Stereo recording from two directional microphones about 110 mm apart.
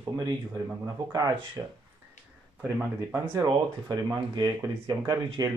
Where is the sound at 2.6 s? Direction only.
15° right (ahead or behind).